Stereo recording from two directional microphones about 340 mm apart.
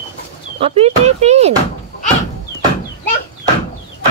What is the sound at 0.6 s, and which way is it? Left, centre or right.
Speech, centre.